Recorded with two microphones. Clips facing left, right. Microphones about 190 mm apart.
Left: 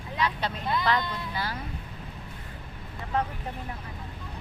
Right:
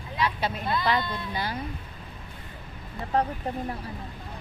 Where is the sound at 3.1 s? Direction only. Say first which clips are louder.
Right 3 dB; 35° right (ahead or behind).